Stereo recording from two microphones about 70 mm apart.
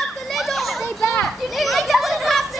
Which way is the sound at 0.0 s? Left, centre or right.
Centre.